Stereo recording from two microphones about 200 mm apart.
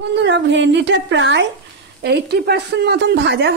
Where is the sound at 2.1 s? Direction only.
55° right (ahead or behind).